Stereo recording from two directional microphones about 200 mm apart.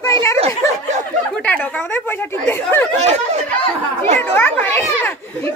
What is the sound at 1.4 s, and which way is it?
Speech, 5° left (ahead or behind).